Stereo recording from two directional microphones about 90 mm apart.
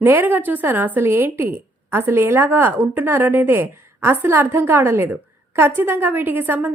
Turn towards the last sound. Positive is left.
turn(degrees=-20)  # may be behind; listen again after turning